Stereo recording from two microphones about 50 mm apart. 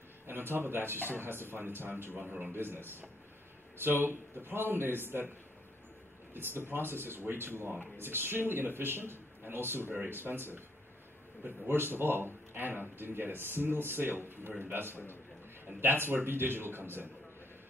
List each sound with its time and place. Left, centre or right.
0.3 s speech: right
2.2 s a man's voice: right
2.5 s speech: right
6.3 s speech: right
11.6 s speech: right